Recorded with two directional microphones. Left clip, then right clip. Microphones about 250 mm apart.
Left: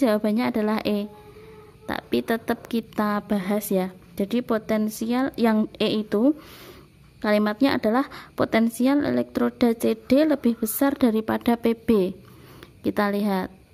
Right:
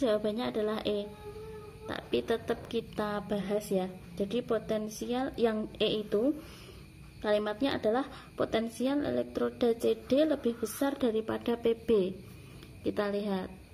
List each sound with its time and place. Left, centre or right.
0.0 s speech: left
1.9 s a woman's voice: left